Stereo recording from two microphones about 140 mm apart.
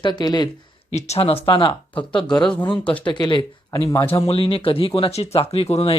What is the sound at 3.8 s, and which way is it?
Speech, 25° left (ahead or behind).